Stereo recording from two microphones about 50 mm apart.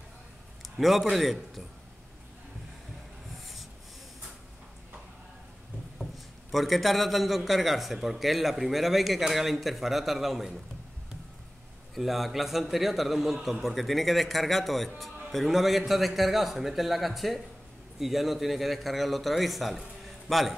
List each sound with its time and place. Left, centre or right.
0.6 s a sound: centre
1.1 s a man's voice: centre
5.9 s a man's voice: centre
11.9 s a man's voice: centre